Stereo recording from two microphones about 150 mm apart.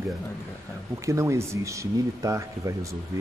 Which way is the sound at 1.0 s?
20° right (ahead or behind).